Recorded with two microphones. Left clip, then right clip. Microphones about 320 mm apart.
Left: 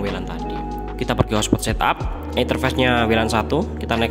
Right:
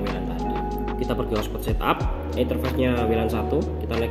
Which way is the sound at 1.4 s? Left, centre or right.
Left.